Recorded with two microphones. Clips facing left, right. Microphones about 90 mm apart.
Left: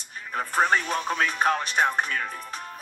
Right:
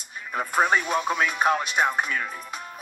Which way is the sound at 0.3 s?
5° right (ahead or behind).